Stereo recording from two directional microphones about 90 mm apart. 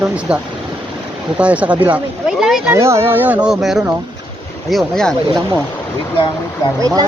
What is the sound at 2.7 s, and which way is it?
Speech, 30° right (ahead or behind).